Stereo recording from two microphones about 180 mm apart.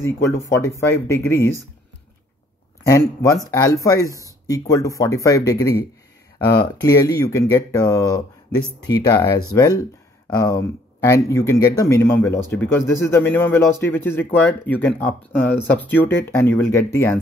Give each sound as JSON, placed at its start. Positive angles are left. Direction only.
{"t": 0.0, "sound": "speech", "side_deg": 15}
{"t": 2.9, "sound": "speech", "side_deg": 20}
{"t": 11.1, "sound": "speech", "side_deg": 15}